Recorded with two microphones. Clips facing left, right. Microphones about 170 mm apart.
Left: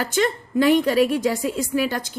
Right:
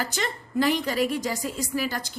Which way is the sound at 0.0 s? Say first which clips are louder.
Left 8 dB; 55° left (ahead or behind).